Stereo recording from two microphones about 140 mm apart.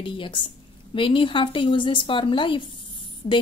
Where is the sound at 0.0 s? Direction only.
35° left (ahead or behind).